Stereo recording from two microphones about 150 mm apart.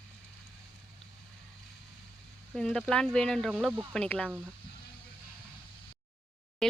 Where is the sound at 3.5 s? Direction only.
10° right (ahead or behind).